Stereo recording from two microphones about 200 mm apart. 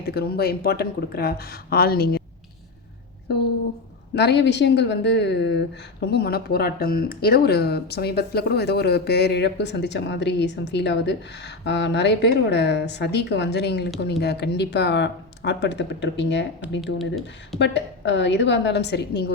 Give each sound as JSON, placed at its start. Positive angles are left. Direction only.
{"t": 0.1, "sound": "speech", "side_deg": 50}
{"t": 4.1, "sound": "a woman's voice", "side_deg": 55}
{"t": 16.8, "sound": "speech", "side_deg": 0}
{"t": 17.6, "sound": "a woman's voice", "side_deg": 60}